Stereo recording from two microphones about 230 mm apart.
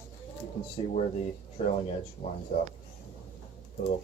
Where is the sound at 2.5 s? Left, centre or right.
Left.